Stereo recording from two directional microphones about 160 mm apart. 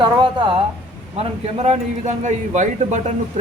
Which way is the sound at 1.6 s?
45° right (ahead or behind).